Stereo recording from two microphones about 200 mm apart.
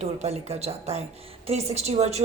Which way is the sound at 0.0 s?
35° right (ahead or behind).